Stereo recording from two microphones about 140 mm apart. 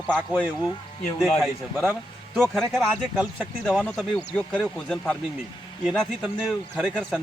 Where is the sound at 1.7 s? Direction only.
10° right (ahead or behind); by 6.1 s 5° left (ahead or behind).